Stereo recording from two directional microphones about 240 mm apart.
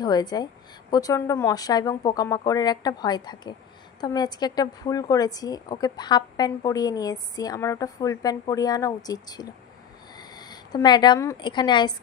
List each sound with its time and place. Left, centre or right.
0.0 s a woman's voice: centre